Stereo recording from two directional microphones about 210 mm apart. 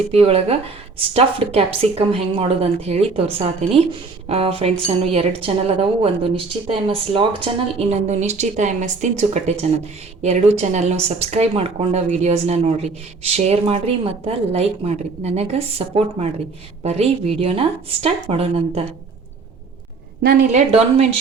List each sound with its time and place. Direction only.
0.1 s a woman's voice: 30° right (ahead or behind)
16.8 s a woman's voice: 30° right (ahead or behind)
20.5 s a woman's voice: 30° right (ahead or behind)